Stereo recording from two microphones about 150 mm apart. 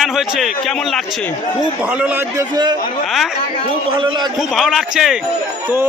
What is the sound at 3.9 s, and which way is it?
Speech, 30° right (ahead or behind).